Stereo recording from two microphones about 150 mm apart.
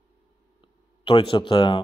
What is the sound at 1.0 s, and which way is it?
Speech, 30° left (ahead or behind).